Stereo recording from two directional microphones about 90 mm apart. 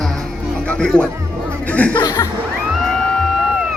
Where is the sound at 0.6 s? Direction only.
15° left (ahead or behind).